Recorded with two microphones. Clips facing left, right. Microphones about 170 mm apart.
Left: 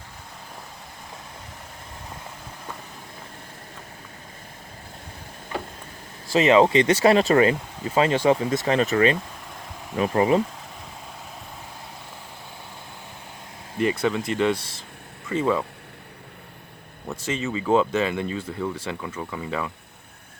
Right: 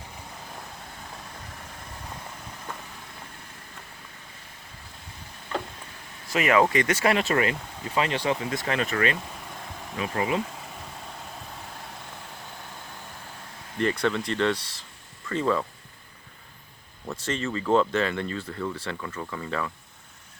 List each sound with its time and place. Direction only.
6.2 s speech: 25° left (ahead or behind)
8.6 s speech: 30° left (ahead or behind)
10.0 s speech: 40° left (ahead or behind)
13.7 s speech: 5° left (ahead or behind)
14.6 s speech: 50° left (ahead or behind)
15.3 s speech: 10° left (ahead or behind)
17.1 s speech: 10° left (ahead or behind)